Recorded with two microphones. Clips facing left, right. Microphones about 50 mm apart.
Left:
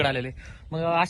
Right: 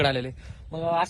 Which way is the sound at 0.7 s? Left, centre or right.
Left.